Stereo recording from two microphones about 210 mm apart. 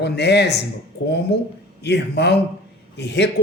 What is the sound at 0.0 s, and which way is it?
Speech, 55° left (ahead or behind).